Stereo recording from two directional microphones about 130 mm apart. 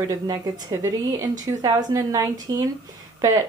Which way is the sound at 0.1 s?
25° right (ahead or behind).